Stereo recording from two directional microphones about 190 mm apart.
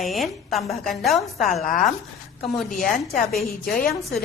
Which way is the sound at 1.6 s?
45° left (ahead or behind).